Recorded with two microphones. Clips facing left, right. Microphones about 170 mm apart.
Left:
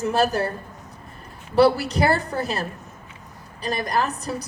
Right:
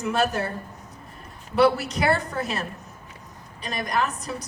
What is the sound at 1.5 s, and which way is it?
A woman's voice, 35° left (ahead or behind).